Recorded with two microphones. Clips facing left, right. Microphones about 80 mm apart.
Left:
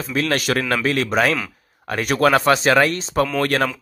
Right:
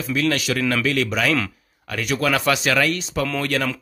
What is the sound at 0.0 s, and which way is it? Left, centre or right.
Speech, left.